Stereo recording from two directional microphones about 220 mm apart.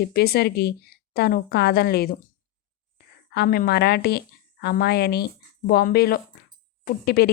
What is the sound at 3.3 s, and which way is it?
A woman's voice, 45° left (ahead or behind).